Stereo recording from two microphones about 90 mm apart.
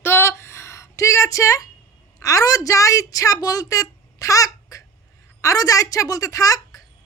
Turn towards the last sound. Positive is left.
turn(degrees=40)  # may be behind; listen again after turning